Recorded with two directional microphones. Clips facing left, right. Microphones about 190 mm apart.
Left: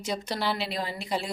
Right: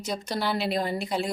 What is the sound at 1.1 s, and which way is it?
Speech, 5° right (ahead or behind).